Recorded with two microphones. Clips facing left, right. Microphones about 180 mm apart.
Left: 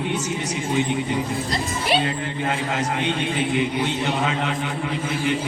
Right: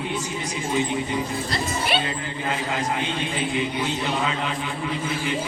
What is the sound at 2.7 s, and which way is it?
A man's voice, 75° left (ahead or behind).